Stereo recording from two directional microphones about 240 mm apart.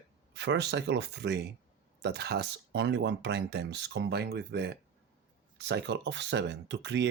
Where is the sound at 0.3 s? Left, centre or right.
Right.